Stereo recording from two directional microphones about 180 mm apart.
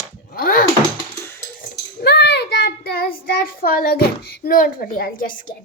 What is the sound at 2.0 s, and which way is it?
Child singing, 65° left (ahead or behind).